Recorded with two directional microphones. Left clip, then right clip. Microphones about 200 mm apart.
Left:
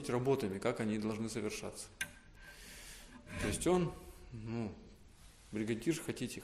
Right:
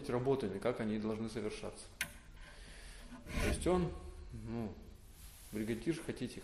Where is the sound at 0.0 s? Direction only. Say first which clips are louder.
Left 1 dB; 40° left (ahead or behind).